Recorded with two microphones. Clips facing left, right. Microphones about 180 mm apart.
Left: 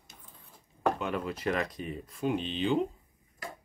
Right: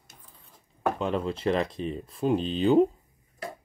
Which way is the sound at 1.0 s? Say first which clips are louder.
Right 5 dB; 30° right (ahead or behind).